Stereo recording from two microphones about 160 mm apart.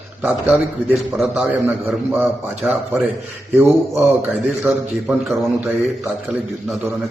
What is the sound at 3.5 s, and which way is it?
Speech, 15° right (ahead or behind).